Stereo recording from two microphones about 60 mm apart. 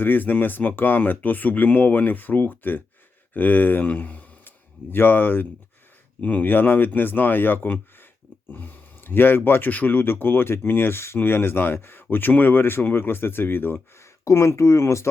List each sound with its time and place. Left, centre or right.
0.0 s speech: left
14.0 s speech: left